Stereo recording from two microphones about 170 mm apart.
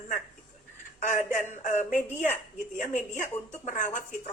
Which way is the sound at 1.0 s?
45° left (ahead or behind).